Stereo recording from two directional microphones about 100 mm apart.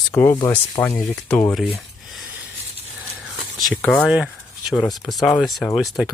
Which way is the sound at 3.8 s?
15° left (ahead or behind).